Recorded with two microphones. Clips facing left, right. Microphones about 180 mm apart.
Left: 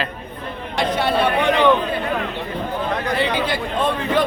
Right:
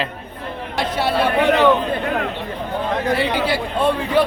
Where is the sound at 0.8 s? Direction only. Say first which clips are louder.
Left 1 dB; 5° right (ahead or behind).